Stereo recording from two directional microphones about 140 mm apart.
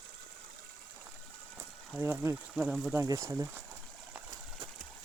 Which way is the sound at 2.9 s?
20° right (ahead or behind).